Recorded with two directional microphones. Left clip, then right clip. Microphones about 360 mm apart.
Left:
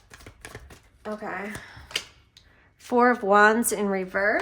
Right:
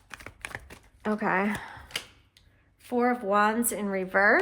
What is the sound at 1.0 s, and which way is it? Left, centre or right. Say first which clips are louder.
Speech: right 6 dB; centre.